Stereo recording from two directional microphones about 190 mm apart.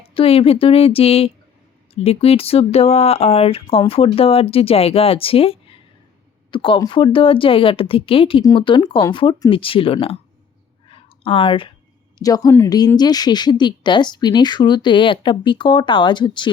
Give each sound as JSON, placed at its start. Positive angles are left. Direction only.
{"t": 0.1, "sound": "a woman's voice", "side_deg": 30}
{"t": 10.8, "sound": "a sound", "side_deg": 30}
{"t": 12.2, "sound": "a woman's voice", "side_deg": 20}